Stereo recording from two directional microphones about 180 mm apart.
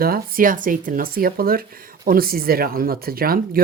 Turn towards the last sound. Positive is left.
turn(degrees=-55)  # may be behind; listen again after turning